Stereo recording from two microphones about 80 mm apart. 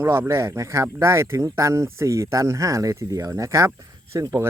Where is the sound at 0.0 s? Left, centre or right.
Right.